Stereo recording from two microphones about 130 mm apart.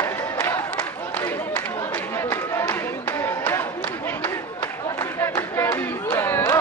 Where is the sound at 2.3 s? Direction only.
15° left (ahead or behind).